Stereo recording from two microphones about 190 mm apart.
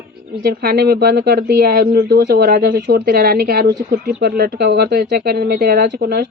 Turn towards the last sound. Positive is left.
turn(degrees=-55)  # may be behind; listen again after turning